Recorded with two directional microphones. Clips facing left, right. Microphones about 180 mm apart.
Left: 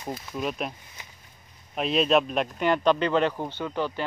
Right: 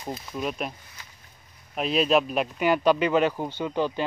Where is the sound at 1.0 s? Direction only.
20° left (ahead or behind).